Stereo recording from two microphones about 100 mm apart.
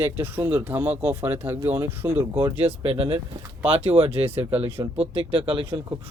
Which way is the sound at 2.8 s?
75° right (ahead or behind).